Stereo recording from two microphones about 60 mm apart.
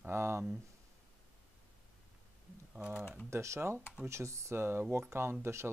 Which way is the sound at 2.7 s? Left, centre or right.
Right.